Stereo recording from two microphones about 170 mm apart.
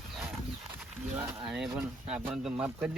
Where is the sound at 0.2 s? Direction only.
10° right (ahead or behind).